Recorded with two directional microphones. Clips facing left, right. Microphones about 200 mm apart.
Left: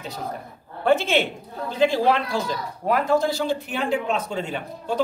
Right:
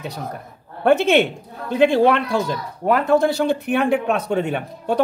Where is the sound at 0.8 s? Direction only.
65° right (ahead or behind).